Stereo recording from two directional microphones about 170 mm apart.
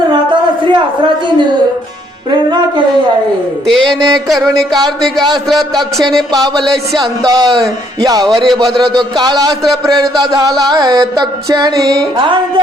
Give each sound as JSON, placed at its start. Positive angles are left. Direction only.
{"t": 0.1, "sound": "a sound", "side_deg": -25}
{"t": 2.3, "sound": "music", "side_deg": -25}
{"t": 3.7, "sound": "a man's voice", "side_deg": 0}
{"t": 5.5, "sound": "a man's voice", "side_deg": 0}
{"t": 7.0, "sound": "music", "side_deg": -25}